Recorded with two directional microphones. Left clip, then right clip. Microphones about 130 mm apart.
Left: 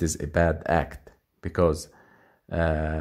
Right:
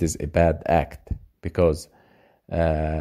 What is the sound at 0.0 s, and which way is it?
Speech, 25° right (ahead or behind).